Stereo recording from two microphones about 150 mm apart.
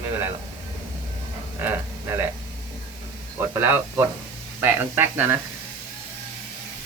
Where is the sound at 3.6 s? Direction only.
15° right (ahead or behind).